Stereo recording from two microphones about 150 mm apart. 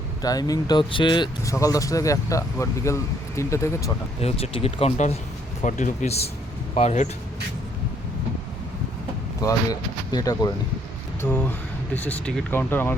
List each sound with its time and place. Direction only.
0.2 s speech: 25° left (ahead or behind)
4.2 s speech: 40° left (ahead or behind)
10.1 s speech: 25° left (ahead or behind)
11.2 s speech: 10° left (ahead or behind)